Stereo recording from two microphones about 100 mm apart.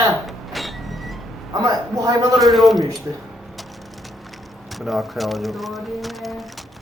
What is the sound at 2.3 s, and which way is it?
Speech, centre (ahead or behind).